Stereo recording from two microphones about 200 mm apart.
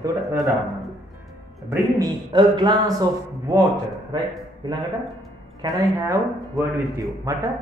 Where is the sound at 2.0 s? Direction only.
20° right (ahead or behind).